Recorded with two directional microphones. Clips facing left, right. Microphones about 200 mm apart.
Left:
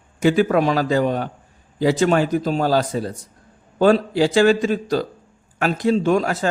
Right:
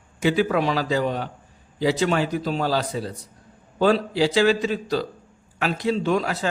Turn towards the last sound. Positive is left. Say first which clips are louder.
# left 4 dB
turn(degrees=45)  # may be behind; listen again after turning